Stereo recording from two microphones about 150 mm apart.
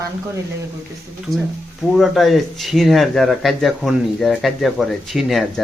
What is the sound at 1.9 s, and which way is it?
Speech, centre (ahead or behind).